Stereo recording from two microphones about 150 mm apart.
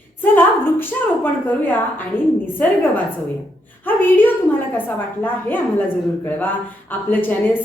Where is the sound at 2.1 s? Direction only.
15° left (ahead or behind).